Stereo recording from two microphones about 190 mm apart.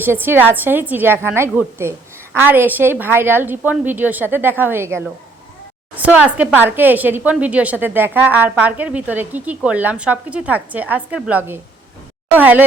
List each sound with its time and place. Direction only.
0.0 s a woman's voice: 10° right (ahead or behind)